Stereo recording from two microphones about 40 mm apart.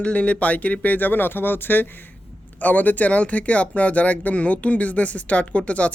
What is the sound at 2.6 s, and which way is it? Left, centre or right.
Speech, left.